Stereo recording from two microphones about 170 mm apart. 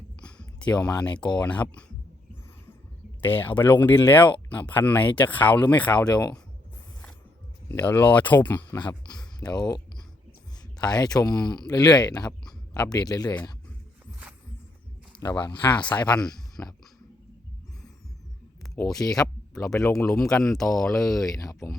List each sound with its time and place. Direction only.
0.2 s a sound: 5° left (ahead or behind)
1.4 s speech: 10° left (ahead or behind)
3.2 s speech: 10° left (ahead or behind)
7.7 s speech: 10° left (ahead or behind)
8.8 s speech: 25° left (ahead or behind)
15.2 s speech: 25° left (ahead or behind)
16.0 s speech: 5° left (ahead or behind)
18.9 s speech: centre (ahead or behind)
20.6 s speech: 20° left (ahead or behind)
20.8 s speech: centre (ahead or behind)
21.4 s speech: 20° left (ahead or behind)